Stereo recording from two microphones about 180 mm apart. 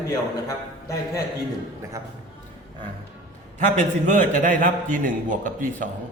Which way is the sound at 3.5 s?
40° right (ahead or behind).